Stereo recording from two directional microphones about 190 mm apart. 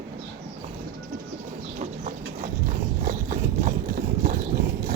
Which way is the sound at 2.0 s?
40° right (ahead or behind).